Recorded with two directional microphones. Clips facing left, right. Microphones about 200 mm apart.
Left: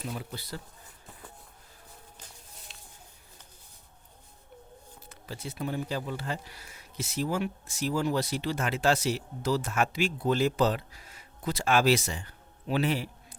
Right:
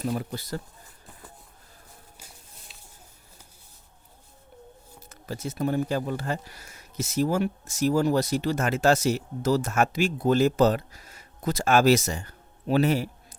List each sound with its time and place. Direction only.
0.0 s speech: 45° right (ahead or behind)
2.1 s music: 10° right (ahead or behind)
4.9 s speech: 45° right (ahead or behind)